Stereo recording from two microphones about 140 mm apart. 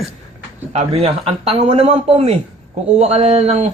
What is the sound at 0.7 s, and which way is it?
Speech, 45° right (ahead or behind).